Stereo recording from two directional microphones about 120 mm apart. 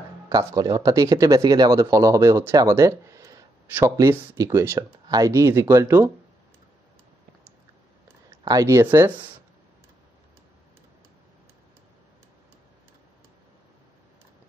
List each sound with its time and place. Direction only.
0.3 s speech: 30° right (ahead or behind)
4.7 s speech: 30° right (ahead or behind)
8.5 s speech: 25° right (ahead or behind)